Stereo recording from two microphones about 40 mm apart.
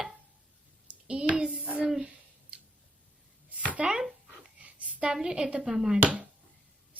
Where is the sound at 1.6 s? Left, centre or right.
Right.